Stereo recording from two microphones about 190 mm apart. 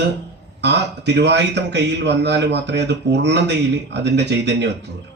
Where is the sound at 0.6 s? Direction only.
65° right (ahead or behind).